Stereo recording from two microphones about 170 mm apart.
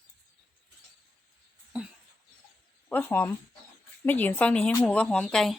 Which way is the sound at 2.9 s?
10° left (ahead or behind).